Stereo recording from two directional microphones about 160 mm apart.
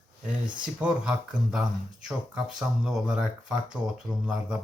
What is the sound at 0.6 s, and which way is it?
Speech, 5° right (ahead or behind).